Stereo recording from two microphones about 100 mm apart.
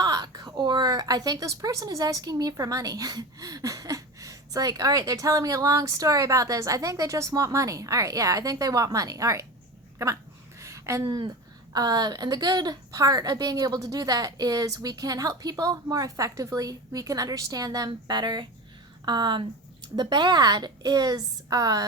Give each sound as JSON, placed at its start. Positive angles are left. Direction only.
{"t": 0.0, "sound": "a woman's voice", "side_deg": -40}
{"t": 10.6, "sound": "a sound", "side_deg": -30}
{"t": 11.7, "sound": "a woman's voice", "side_deg": -40}